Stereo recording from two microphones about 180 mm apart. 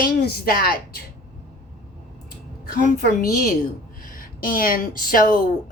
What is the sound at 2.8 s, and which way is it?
A woman's voice, 50° left (ahead or behind).